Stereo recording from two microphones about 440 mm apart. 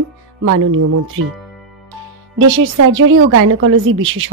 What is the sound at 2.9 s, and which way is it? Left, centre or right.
Speech, right.